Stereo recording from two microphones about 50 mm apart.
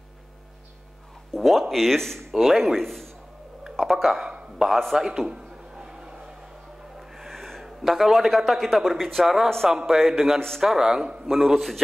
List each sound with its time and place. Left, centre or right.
1.3 s a man's voice: centre
4.3 s a sound: centre
4.6 s a man's voice: centre
4.9 s a sound: centre
7.0 s gasp: centre
7.6 s a man's voice: centre
11.2 s a man's voice: centre